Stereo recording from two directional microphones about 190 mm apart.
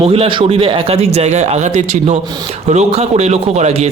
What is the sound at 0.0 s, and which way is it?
A man's voice, 30° right (ahead or behind).